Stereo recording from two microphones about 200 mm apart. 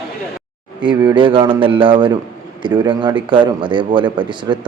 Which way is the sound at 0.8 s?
25° right (ahead or behind).